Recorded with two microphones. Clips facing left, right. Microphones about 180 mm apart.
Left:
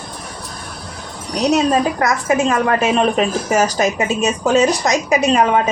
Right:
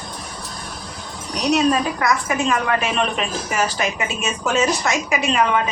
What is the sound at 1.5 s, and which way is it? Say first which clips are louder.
A woman's voice: left 2 dB; 45° left (ahead or behind).